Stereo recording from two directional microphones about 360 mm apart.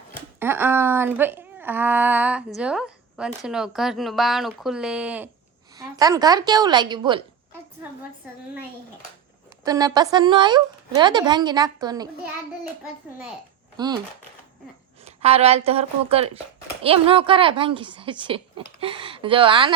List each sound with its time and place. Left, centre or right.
0.3 s a woman's voice: centre
9.6 s speech: centre
13.7 s speech: centre
15.0 s speech: centre